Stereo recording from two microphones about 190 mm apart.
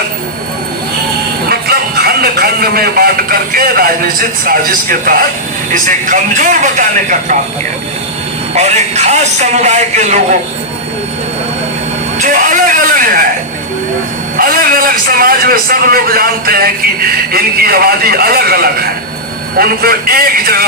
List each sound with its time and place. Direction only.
1.5 s a man's voice: 55° right (ahead or behind)
8.5 s speech: 35° right (ahead or behind)
12.2 s a sound: 45° right (ahead or behind)
14.3 s a man's voice: 50° right (ahead or behind)